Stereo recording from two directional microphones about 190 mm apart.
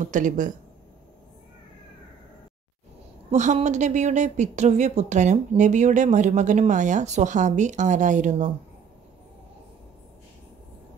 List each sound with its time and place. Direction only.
0.0 s a woman's voice: 40° right (ahead or behind)
3.3 s a woman's voice: 35° right (ahead or behind)